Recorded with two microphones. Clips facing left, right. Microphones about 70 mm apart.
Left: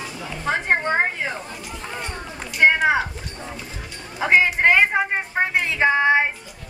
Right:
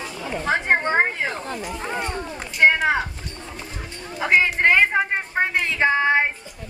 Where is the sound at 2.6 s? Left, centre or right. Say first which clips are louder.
Left 1 dB; centre.